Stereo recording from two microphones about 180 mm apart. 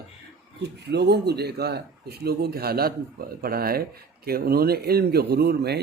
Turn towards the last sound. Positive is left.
turn(degrees=-65)  # may be behind; listen again after turning